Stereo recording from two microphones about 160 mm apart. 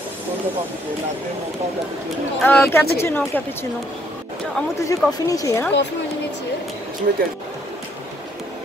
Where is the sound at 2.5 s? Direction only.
15° left (ahead or behind).